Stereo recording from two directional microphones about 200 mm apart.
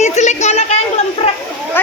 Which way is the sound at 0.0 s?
35° left (ahead or behind).